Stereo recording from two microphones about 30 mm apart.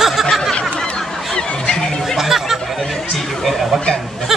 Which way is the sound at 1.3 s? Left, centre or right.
Left.